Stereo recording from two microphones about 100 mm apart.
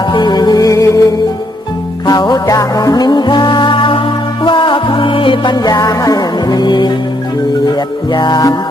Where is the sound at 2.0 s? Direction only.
45° left (ahead or behind).